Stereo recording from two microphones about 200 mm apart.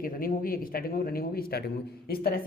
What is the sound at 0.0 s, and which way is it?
Speech, 45° left (ahead or behind).